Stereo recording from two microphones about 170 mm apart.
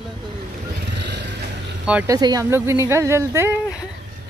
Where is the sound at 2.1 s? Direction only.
20° right (ahead or behind).